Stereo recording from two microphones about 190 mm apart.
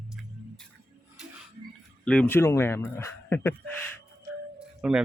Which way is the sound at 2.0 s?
5° left (ahead or behind).